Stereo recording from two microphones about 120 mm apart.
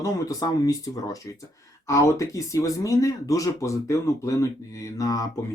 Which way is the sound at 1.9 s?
25° left (ahead or behind).